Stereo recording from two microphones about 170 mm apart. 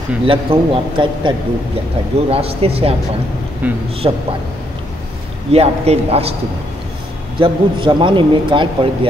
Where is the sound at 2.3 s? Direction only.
35° right (ahead or behind).